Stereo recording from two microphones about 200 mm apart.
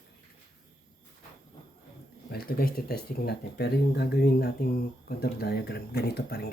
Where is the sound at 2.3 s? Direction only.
50° left (ahead or behind).